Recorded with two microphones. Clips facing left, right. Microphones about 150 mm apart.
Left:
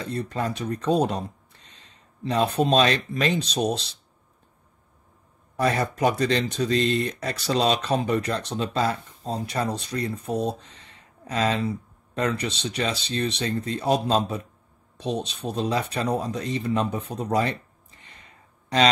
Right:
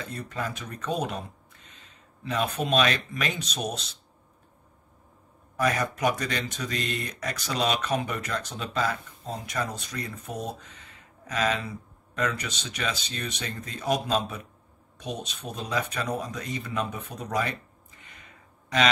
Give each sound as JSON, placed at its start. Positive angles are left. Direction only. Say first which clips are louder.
{"t": 0.0, "sound": "speech", "louder": "left 6 dB", "side_deg": 30}
{"t": 5.6, "sound": "speech", "louder": "left 3 dB", "side_deg": 30}